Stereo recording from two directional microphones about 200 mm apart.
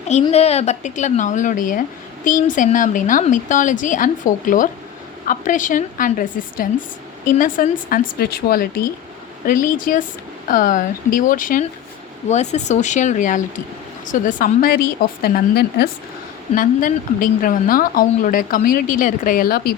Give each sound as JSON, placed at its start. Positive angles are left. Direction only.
{"t": 0.1, "sound": "a woman's voice", "side_deg": 35}